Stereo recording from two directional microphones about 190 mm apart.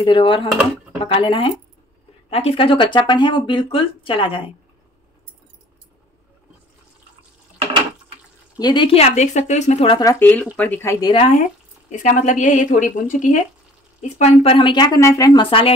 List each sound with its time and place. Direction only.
0.0 s speech: 25° left (ahead or behind)
8.5 s a woman's voice: 25° left (ahead or behind)
9.9 s speech: 15° left (ahead or behind)
11.9 s a woman's voice: 40° left (ahead or behind); by 15.7 s 25° left (ahead or behind)